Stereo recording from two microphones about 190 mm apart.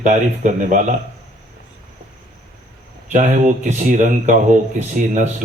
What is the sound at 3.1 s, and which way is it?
Speech, 40° right (ahead or behind).